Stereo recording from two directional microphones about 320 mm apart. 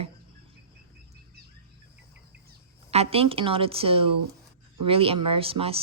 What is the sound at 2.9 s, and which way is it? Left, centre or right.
Speech, centre.